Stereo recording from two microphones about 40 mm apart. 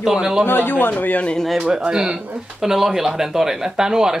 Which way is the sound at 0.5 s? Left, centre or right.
Left.